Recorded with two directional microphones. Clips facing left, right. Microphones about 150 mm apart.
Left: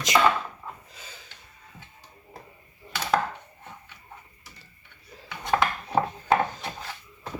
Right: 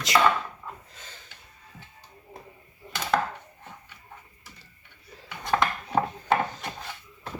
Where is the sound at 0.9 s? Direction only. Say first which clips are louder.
Left 1 dB; 10° left (ahead or behind).